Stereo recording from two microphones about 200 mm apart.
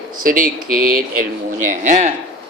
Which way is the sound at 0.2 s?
45° right (ahead or behind).